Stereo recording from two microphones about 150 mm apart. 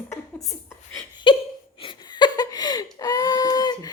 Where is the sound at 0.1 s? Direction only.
Centre (ahead or behind).